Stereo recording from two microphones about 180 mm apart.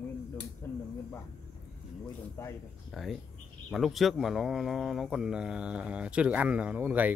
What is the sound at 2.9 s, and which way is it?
Speech, centre (ahead or behind).